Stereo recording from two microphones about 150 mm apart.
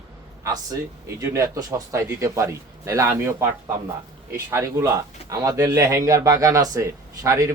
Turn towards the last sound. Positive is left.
turn(degrees=-20)  # may be behind; listen again after turning